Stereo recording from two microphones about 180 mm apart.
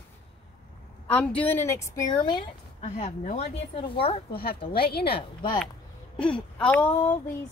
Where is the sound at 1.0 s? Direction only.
5° left (ahead or behind); by 2.5 s 25° left (ahead or behind).